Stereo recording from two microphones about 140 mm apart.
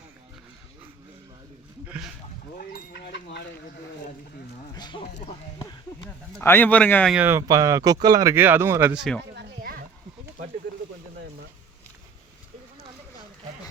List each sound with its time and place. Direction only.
2.6 s chicken: 90° left
4.7 s speech: 30° left (ahead or behind)
6.4 s speech: 15° left (ahead or behind)
7.1 s speech: 15° right (ahead or behind)